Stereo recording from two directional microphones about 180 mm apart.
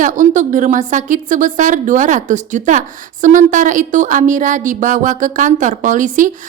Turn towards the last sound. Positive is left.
turn(degrees=-45)  # may be behind; listen again after turning